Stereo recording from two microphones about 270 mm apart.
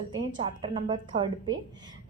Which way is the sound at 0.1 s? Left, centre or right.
Centre.